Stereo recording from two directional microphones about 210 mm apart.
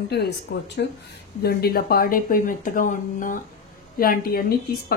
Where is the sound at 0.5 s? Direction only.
50° left (ahead or behind).